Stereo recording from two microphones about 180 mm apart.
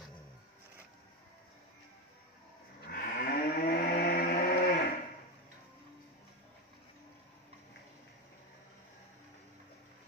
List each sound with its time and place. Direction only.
2.9 s moo: 55° left (ahead or behind)